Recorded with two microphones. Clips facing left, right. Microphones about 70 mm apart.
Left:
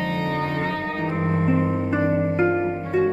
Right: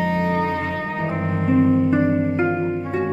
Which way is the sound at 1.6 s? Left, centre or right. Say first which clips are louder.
Right 7 dB; centre.